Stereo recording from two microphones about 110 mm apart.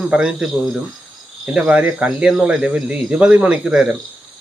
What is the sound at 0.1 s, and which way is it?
Speech, 5° right (ahead or behind).